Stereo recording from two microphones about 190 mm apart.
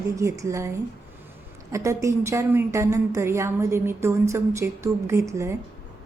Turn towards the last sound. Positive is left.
turn(degrees=-15)  # may be behind; listen again after turning